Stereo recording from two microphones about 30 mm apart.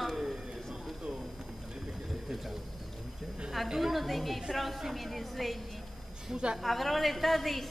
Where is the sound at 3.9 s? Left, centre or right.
Centre.